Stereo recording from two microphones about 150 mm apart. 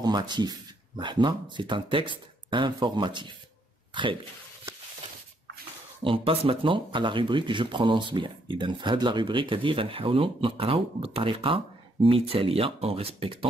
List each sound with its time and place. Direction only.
0.0 s speech: 30° right (ahead or behind)
6.0 s speech: 35° right (ahead or behind)